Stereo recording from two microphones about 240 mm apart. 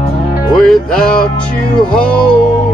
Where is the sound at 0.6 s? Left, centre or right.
Centre.